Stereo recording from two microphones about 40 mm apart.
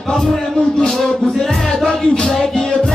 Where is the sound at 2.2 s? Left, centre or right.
Centre.